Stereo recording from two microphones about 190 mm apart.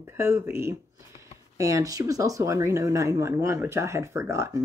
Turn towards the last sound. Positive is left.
turn(degrees=-15)  # may be behind; listen again after turning